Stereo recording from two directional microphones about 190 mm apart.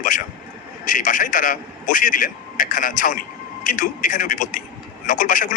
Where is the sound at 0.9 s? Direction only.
45° left (ahead or behind).